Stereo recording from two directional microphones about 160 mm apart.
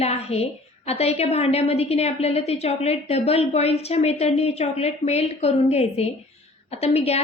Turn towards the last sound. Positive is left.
turn(degrees=40)  # may be behind; listen again after turning